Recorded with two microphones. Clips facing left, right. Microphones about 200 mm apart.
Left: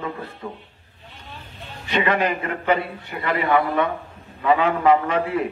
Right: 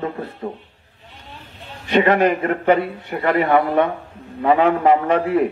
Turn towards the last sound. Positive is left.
turn(degrees=-55)  # may be behind; listen again after turning